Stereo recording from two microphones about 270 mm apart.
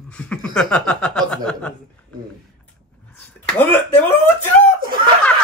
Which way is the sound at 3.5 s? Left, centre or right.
Centre.